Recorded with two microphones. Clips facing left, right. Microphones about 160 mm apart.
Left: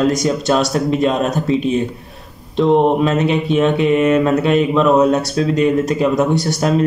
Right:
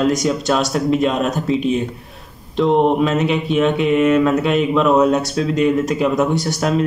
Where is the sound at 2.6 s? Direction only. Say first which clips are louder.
Left 2 dB; centre (ahead or behind).